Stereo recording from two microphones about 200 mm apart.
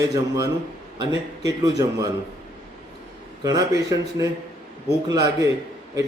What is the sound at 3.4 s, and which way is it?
Speech, 20° right (ahead or behind).